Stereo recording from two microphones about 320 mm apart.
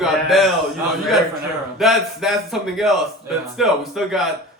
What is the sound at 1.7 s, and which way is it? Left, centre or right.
A man's voice, centre.